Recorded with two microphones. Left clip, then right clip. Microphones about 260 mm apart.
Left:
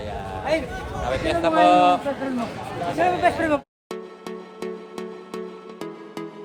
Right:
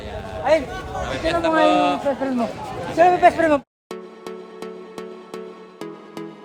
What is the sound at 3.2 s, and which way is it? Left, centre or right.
Speech, right.